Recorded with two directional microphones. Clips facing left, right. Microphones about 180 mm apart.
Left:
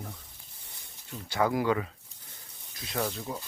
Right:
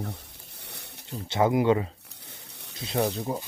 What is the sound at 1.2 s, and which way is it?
Speech, 25° right (ahead or behind).